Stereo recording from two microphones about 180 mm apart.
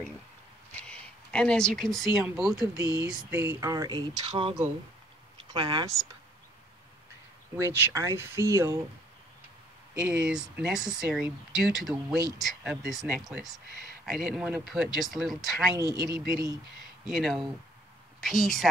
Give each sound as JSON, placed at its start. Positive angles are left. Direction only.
{"t": 0.8, "sound": "a sound", "side_deg": 5}
{"t": 2.1, "sound": "speech", "side_deg": -5}
{"t": 2.6, "sound": "speech", "side_deg": -20}
{"t": 7.5, "sound": "speech", "side_deg": -15}
{"t": 9.9, "sound": "speech", "side_deg": -5}
{"t": 15.9, "sound": "speech", "side_deg": -20}
{"t": 17.1, "sound": "speech", "side_deg": 0}